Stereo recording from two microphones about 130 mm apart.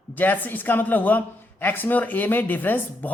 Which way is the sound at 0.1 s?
15° left (ahead or behind).